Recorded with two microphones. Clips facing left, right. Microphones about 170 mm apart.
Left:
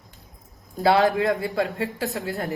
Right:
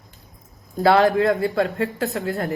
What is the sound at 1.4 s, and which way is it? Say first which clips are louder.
Speech: right 4 dB; 15° left (ahead or behind).